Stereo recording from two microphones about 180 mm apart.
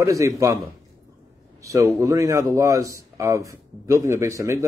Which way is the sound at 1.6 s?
15° right (ahead or behind).